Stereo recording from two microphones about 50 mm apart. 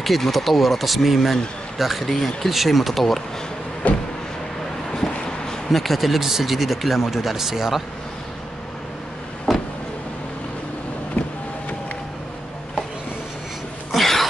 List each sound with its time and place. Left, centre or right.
0.0 s speech: centre
3.8 s vehicle: left
4.9 s a sound: centre
5.7 s speech: centre
9.5 s vehicle: centre
11.2 s vehicle: left
13.9 s a sound: centre